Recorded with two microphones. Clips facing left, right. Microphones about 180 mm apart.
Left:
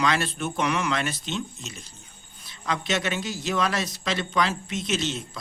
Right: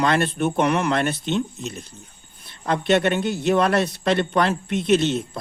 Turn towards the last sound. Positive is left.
turn(degrees=-55)  # may be behind; listen again after turning